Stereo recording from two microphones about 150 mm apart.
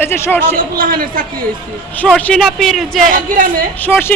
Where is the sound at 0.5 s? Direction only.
70° right (ahead or behind).